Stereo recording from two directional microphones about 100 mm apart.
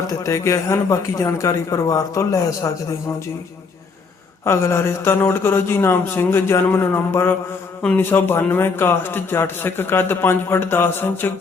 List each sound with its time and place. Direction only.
0.1 s speech: 30° left (ahead or behind)
4.4 s a man's voice: 25° left (ahead or behind)